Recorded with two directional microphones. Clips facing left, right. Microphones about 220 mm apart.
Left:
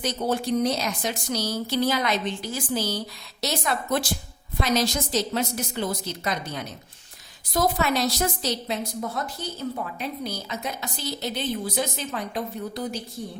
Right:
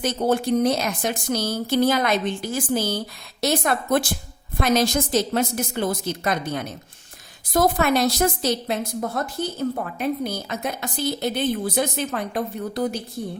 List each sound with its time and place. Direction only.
0.0 s a woman's voice: 50° right (ahead or behind)